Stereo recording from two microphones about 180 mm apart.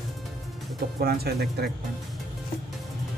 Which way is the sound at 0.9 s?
60° right (ahead or behind).